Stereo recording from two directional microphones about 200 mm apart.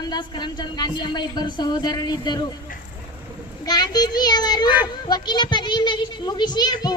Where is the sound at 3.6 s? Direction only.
20° left (ahead or behind).